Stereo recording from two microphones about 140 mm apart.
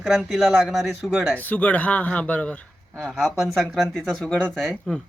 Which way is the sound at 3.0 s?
5° right (ahead or behind).